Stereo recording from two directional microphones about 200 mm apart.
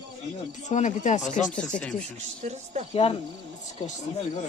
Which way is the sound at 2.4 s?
35° right (ahead or behind).